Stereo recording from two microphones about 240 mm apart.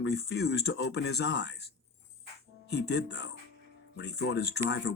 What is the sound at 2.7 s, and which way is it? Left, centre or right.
Speech, left.